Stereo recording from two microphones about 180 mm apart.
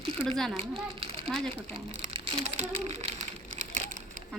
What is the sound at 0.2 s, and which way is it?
Speech, 5° left (ahead or behind).